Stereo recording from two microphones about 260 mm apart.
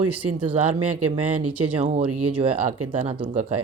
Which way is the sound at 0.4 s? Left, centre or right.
Right.